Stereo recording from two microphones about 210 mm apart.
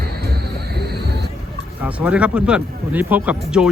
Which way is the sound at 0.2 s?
50° right (ahead or behind).